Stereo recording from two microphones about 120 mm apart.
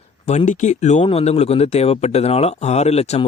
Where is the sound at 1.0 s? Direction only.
60° left (ahead or behind).